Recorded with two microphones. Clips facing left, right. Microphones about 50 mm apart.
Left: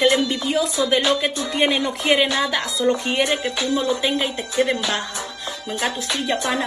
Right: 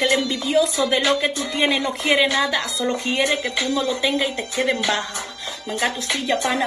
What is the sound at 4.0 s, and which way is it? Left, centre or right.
Music, left.